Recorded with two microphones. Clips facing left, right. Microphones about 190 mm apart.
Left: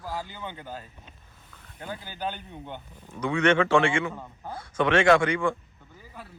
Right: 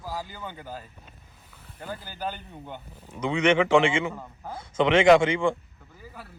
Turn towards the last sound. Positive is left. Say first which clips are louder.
# right 3 dB
turn(degrees=-25)  # may be behind; listen again after turning